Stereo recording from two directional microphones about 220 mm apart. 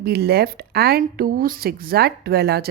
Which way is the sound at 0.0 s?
45° right (ahead or behind).